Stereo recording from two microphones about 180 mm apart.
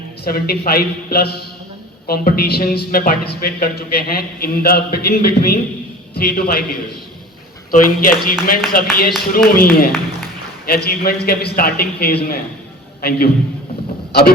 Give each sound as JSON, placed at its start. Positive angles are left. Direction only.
{"t": 0.3, "sound": "a man's voice", "side_deg": 55}